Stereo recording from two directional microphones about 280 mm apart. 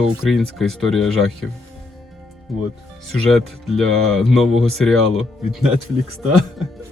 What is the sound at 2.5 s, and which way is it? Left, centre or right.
Speech, centre.